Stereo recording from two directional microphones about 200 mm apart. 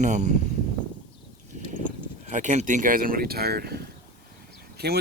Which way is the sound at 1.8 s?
35° right (ahead or behind).